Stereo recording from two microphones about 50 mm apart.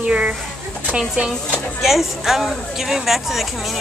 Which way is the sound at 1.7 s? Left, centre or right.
Centre.